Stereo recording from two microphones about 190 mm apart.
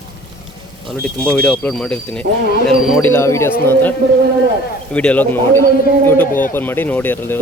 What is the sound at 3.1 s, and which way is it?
Speech, 15° left (ahead or behind).